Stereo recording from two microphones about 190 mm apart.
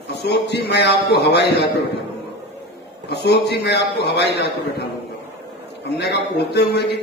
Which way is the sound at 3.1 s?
60° left (ahead or behind).